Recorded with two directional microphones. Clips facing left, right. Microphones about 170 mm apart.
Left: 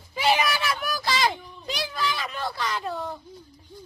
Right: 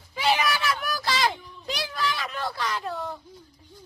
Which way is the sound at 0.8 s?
Centre (ahead or behind).